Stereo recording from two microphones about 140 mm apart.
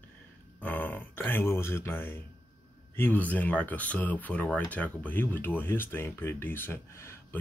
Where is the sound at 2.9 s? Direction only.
15° left (ahead or behind).